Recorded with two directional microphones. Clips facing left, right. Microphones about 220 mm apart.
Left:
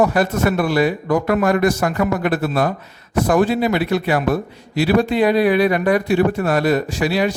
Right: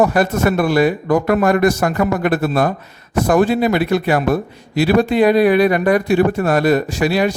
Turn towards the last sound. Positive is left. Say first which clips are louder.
# right 2 dB
turn(degrees=-50)  # may be behind; listen again after turning